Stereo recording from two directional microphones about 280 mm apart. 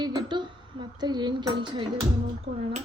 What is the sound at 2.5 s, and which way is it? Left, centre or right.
Speech, right.